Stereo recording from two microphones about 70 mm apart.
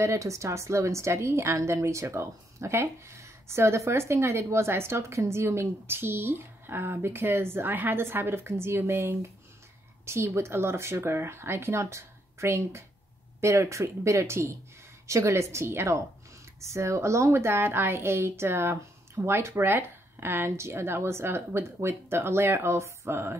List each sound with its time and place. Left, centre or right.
0.0 s a woman's voice: right